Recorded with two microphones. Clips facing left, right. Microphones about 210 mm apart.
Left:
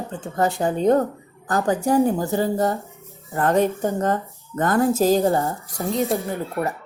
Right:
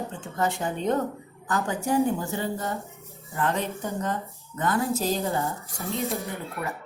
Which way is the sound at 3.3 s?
50° left (ahead or behind).